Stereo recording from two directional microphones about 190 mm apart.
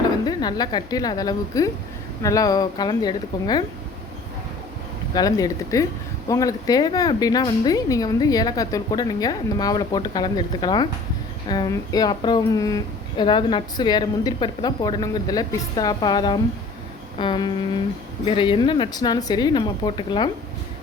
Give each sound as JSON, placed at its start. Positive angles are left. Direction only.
{"t": 0.3, "sound": "speech", "side_deg": 20}
{"t": 5.1, "sound": "speech", "side_deg": 20}